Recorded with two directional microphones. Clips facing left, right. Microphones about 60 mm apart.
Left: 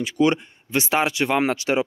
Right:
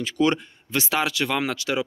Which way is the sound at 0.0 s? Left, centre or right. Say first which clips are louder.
Left 2 dB; centre.